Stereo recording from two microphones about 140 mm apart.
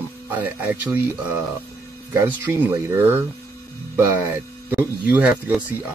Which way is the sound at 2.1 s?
20° right (ahead or behind).